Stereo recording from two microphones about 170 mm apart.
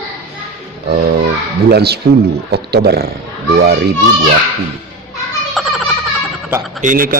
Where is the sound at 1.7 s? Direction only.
70° right (ahead or behind).